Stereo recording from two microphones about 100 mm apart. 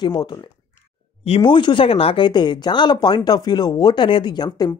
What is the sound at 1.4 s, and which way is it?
Speech, 50° left (ahead or behind).